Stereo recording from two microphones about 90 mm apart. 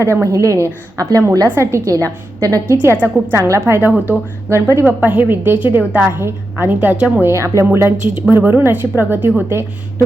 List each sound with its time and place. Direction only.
0.0 s a woman's voice: 30° right (ahead or behind)
2.8 s speech: 20° right (ahead or behind)
3.3 s a woman's voice: 35° right (ahead or behind)
3.8 s a woman's voice: 20° right (ahead or behind)
4.9 s speech: 20° right (ahead or behind)
6.7 s a woman's voice: 10° right (ahead or behind)
7.2 s speech: 30° right (ahead or behind)